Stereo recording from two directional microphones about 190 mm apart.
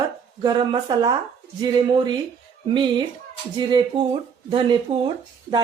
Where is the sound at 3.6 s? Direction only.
25° right (ahead or behind).